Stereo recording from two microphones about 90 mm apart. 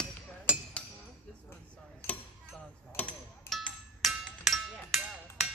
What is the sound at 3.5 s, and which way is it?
Music, 5° left (ahead or behind).